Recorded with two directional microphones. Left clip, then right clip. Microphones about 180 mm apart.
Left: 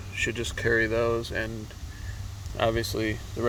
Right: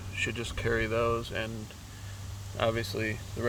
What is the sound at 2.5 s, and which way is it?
Speech, 10° left (ahead or behind).